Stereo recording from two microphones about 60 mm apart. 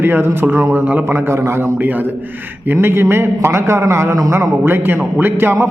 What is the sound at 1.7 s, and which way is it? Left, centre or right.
A man's voice, right.